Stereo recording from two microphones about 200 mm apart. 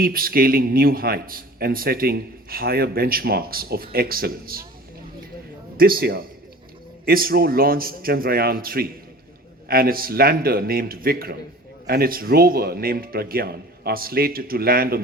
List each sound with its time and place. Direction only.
0.0 s a man's voice: 45° right (ahead or behind)
5.7 s a man's voice: 45° right (ahead or behind)